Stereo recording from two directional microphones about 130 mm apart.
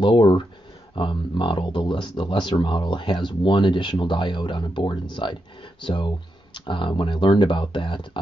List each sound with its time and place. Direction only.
0.0 s speech: 35° left (ahead or behind)